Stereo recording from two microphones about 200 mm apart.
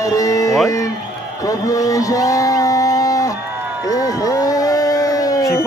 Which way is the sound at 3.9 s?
15° left (ahead or behind).